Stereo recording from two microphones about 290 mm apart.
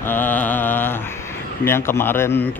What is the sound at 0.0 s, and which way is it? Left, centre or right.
Mantra, centre.